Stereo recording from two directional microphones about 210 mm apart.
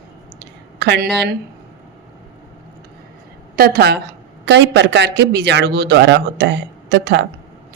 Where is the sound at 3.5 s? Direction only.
45° right (ahead or behind).